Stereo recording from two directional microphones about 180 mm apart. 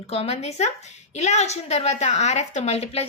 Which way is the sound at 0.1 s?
35° left (ahead or behind).